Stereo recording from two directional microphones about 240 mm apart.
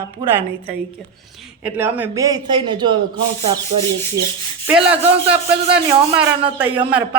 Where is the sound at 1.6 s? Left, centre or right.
Centre.